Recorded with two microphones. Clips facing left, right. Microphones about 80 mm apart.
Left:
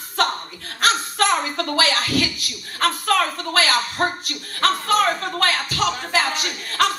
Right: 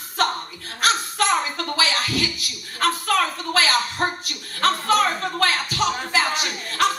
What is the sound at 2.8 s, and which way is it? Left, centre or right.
Chuckle, left.